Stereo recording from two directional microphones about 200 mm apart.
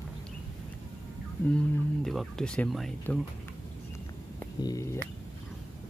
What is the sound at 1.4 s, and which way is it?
Speech, 5° left (ahead or behind).